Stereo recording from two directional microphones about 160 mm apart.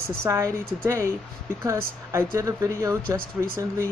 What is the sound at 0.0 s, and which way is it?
A woman's voice, 15° right (ahead or behind).